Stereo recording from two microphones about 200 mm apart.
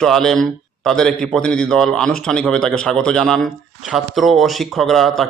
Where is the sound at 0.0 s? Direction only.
Centre (ahead or behind).